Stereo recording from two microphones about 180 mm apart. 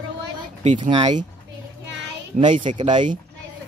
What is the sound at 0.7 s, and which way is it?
Speech, 25° right (ahead or behind).